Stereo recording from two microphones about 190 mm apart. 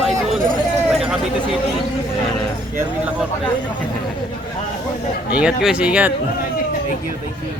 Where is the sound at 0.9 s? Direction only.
5° right (ahead or behind).